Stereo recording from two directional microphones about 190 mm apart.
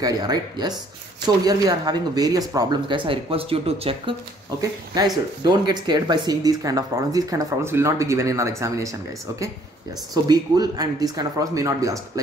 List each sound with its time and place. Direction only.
0.0 s speech: 20° right (ahead or behind)
4.6 s speech: 20° right (ahead or behind)
10.1 s speech: 20° right (ahead or behind)